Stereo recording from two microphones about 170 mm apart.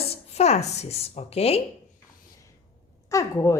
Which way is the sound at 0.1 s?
40° left (ahead or behind).